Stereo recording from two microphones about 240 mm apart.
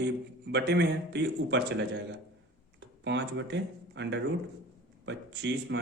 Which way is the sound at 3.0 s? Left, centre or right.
Right.